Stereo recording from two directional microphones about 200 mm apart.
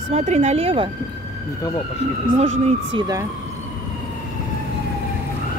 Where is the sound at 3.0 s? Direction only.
20° right (ahead or behind).